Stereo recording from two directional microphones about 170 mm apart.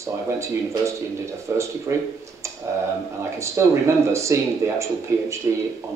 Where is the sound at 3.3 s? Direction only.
15° right (ahead or behind).